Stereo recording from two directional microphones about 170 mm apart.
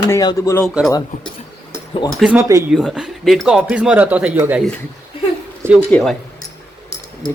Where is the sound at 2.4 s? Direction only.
15° right (ahead or behind).